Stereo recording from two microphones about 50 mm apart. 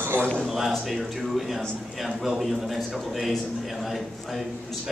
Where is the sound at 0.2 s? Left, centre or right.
Centre.